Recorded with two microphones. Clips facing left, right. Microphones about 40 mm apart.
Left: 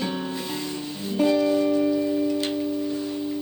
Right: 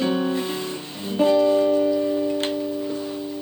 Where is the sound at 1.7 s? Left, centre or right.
Centre.